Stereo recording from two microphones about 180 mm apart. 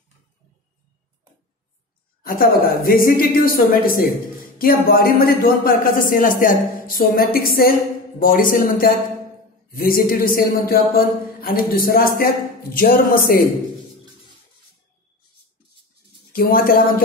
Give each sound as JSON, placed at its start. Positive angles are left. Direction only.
{"t": 2.2, "sound": "a woman's voice", "side_deg": 55}
{"t": 16.3, "sound": "a woman's voice", "side_deg": 55}